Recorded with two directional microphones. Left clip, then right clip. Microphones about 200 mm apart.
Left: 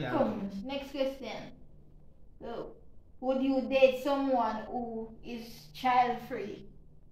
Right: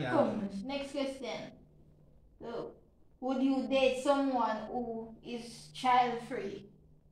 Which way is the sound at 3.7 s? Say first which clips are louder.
Left 4 dB; 20° left (ahead or behind).